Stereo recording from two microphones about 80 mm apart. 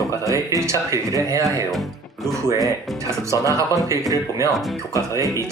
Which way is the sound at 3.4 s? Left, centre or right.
Right.